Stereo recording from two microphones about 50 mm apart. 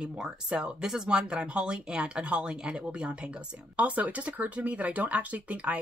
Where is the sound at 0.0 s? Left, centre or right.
Centre.